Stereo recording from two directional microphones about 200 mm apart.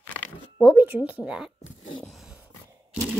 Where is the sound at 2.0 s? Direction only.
Centre (ahead or behind).